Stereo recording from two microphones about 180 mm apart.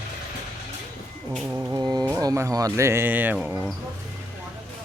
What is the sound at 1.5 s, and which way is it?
Speech, 15° right (ahead or behind).